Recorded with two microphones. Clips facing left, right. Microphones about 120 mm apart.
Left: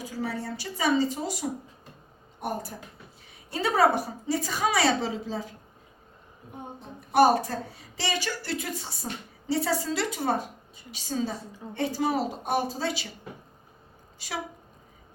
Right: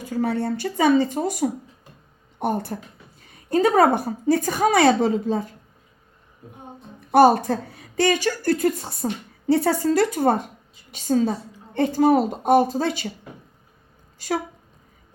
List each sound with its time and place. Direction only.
0.0 s a woman's voice: 55° right (ahead or behind)
3.2 s a woman's voice: 50° right (ahead or behind)
7.1 s a woman's voice: 60° right (ahead or behind)